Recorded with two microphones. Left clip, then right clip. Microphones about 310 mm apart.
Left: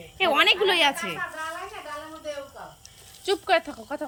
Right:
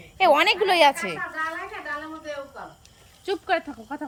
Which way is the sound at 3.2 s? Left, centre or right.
Centre.